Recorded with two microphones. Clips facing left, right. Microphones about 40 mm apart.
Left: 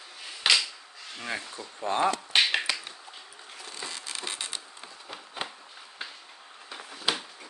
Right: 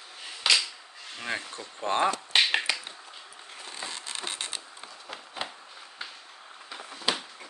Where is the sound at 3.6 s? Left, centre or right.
Right.